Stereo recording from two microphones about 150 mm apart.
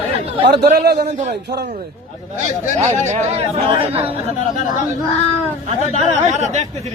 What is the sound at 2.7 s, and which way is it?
Speech, 50° right (ahead or behind).